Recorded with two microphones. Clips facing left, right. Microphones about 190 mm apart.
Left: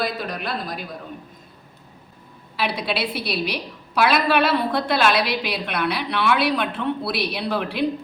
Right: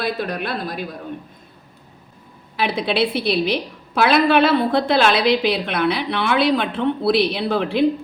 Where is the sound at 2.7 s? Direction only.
25° right (ahead or behind).